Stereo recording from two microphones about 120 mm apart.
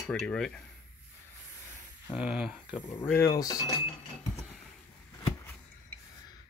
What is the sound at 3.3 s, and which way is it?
Speech, 30° left (ahead or behind).